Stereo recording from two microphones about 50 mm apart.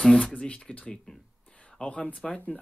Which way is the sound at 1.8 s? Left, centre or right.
Left.